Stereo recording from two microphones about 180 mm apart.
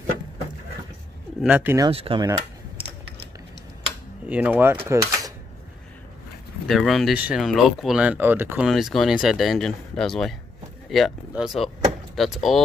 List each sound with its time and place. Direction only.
1.4 s speech: 10° right (ahead or behind)
1.9 s speech: 30° right (ahead or behind)
4.3 s speech: 10° right (ahead or behind)
6.7 s speech: centre (ahead or behind)